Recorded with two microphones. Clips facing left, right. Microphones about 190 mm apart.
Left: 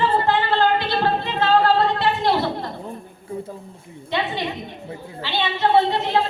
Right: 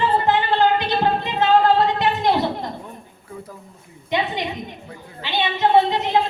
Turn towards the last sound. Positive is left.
turn(degrees=-15)  # may be behind; listen again after turning